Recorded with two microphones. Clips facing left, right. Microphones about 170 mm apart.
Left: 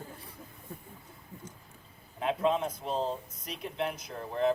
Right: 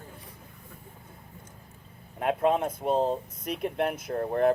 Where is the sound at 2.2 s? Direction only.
55° right (ahead or behind).